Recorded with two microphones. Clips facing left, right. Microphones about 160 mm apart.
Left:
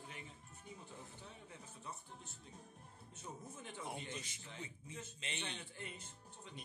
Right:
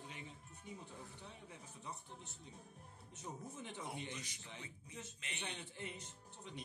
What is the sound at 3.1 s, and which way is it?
Speech, 20° right (ahead or behind).